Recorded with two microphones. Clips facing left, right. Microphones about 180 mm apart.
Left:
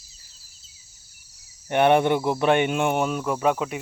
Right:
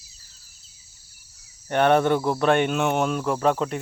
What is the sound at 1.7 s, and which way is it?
Speech, 15° left (ahead or behind).